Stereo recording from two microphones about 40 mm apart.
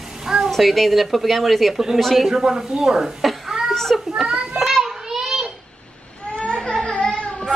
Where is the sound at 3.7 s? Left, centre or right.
Centre.